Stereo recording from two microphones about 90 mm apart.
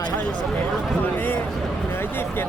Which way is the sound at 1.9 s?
25° left (ahead or behind).